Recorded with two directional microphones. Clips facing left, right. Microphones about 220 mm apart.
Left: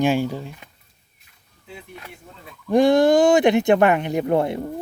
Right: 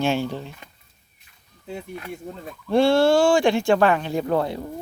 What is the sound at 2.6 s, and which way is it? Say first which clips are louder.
Speech: left 2 dB; 15° left (ahead or behind).